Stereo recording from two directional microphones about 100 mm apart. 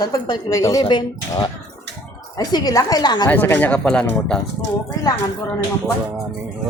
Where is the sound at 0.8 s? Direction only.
50° left (ahead or behind).